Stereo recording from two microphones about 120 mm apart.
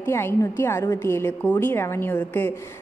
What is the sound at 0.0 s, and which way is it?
A woman's voice, 20° left (ahead or behind).